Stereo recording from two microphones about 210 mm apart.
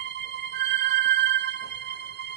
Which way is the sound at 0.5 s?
55° right (ahead or behind).